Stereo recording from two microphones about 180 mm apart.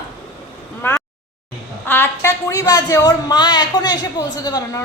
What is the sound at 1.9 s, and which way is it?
A woman's voice, 15° left (ahead or behind).